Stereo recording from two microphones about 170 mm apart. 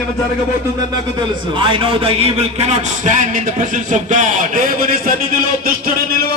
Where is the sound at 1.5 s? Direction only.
30° right (ahead or behind); by 5.7 s 55° right (ahead or behind).